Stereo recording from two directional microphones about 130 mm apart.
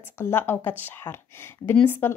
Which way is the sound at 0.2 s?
15° left (ahead or behind).